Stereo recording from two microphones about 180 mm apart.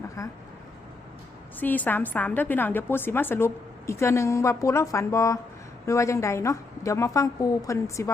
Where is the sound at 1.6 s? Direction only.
10° left (ahead or behind).